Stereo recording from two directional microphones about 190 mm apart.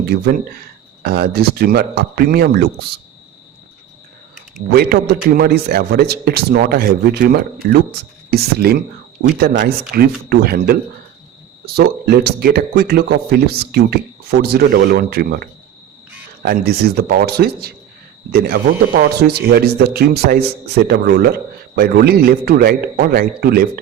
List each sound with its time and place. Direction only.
0.0 s speech: 55° right (ahead or behind)
4.7 s speech: 55° right (ahead or behind)